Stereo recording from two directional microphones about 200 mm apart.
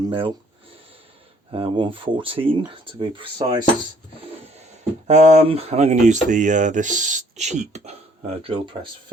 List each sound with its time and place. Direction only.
0.0 s speech: 25° right (ahead or behind)
1.5 s speech: 25° right (ahead or behind)
5.0 s speech: 35° right (ahead or behind)